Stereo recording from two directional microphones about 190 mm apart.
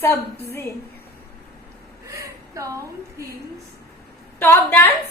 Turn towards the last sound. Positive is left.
turn(degrees=10)  # may be behind; listen again after turning